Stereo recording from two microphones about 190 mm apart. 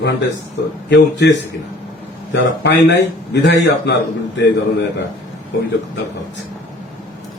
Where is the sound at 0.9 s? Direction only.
70° left (ahead or behind).